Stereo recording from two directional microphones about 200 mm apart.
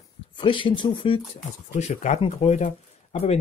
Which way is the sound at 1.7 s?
35° left (ahead or behind).